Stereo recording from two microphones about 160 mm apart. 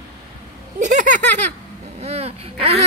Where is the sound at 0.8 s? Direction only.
50° right (ahead or behind).